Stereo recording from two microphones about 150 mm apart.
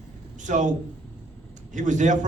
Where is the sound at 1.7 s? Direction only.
55° right (ahead or behind).